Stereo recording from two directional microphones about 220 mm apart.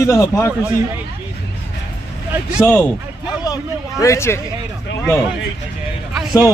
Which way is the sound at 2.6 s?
10° left (ahead or behind).